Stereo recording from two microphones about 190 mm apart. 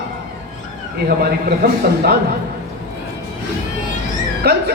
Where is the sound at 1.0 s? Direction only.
55° right (ahead or behind).